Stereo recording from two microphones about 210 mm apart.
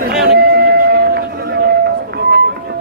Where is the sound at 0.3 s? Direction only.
50° right (ahead or behind).